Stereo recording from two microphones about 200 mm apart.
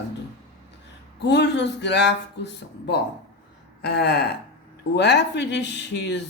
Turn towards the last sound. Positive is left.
turn(degrees=60)  # may be behind; listen again after turning